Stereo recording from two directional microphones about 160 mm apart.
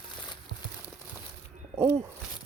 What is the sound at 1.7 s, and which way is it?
Speech, 15° right (ahead or behind).